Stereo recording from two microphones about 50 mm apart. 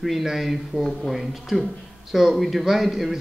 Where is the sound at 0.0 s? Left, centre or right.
Centre.